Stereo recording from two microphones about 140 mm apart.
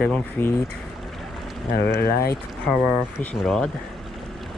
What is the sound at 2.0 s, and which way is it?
Speech, 90° left.